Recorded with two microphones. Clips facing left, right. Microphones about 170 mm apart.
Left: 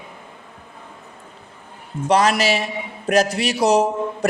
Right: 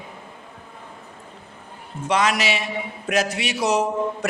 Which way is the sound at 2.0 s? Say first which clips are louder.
Left 4 dB; 35° left (ahead or behind).